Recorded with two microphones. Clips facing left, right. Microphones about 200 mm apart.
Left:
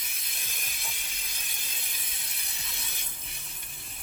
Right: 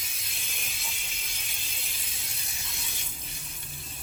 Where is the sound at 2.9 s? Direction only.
55° left (ahead or behind).